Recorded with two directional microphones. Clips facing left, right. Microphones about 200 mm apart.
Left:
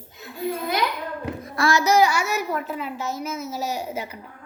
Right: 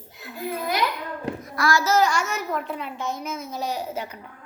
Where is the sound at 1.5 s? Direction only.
25° left (ahead or behind).